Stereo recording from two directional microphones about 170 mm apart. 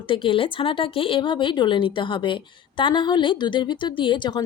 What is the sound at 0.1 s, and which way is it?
Speech, 30° left (ahead or behind).